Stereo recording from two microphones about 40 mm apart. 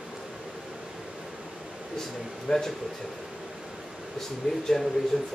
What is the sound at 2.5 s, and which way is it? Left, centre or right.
Speech, centre.